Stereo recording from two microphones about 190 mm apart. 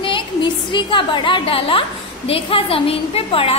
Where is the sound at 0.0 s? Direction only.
25° left (ahead or behind).